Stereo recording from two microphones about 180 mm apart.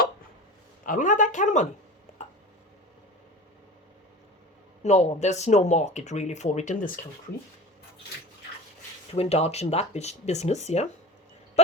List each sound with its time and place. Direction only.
0.9 s speech: 45° left (ahead or behind)
2.1 s a sound: 40° left (ahead or behind)
4.8 s speech: 40° left (ahead or behind)
9.1 s speech: 35° left (ahead or behind)